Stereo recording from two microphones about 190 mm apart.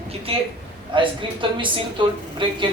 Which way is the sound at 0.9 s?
25° right (ahead or behind).